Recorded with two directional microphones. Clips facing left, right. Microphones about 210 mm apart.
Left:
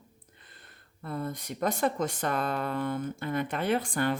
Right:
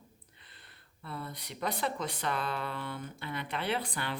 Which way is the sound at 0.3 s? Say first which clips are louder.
Left 4 dB; 45° left (ahead or behind).